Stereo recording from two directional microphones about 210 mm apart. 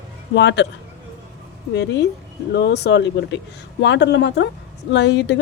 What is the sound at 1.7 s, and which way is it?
Speech, 55° left (ahead or behind).